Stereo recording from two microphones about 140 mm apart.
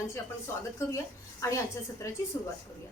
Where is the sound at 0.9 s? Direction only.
20° left (ahead or behind).